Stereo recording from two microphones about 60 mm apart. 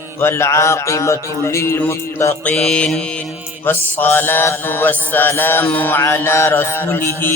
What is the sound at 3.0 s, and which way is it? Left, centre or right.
Mantra, centre.